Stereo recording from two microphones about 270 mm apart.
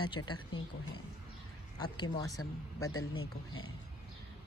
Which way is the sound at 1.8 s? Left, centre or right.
Centre.